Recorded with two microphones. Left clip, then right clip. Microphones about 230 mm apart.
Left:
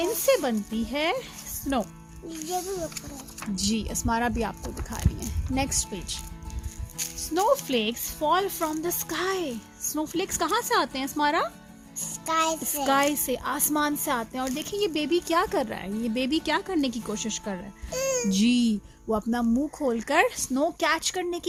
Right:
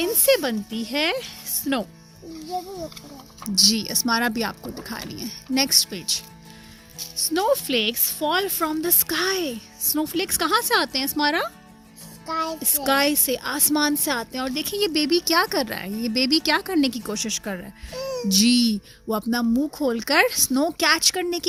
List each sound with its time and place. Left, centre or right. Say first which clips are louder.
0.0 s speech: right 3 dB; right
3.6 s speech: right 11 dB; right
7.3 s speech: right 2 dB; right
12.2 s music: left 1 dB; left
12.8 s speech: right 3 dB; right
17.9 s a child's voice: left 2 dB; left
18.3 s speech: right 5 dB; right